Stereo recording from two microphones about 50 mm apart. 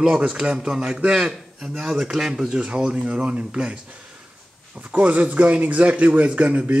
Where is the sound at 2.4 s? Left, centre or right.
Centre.